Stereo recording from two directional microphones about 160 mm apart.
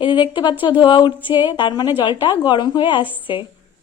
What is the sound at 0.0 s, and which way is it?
Speech, 30° left (ahead or behind).